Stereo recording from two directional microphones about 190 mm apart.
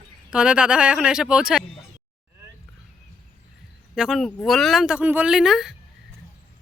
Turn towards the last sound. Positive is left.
turn(degrees=0)  # may be behind; listen again after turning